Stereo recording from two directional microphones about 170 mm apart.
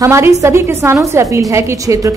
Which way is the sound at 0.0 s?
15° right (ahead or behind).